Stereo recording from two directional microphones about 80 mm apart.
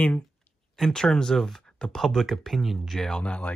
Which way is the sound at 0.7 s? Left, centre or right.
Centre.